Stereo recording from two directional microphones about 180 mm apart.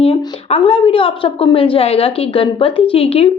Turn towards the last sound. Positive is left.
turn(degrees=30)  # may be behind; listen again after turning